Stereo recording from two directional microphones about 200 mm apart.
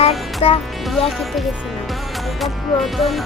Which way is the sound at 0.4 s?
30° left (ahead or behind).